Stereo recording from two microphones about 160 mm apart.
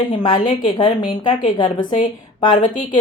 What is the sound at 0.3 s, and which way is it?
Speech, 55° left (ahead or behind).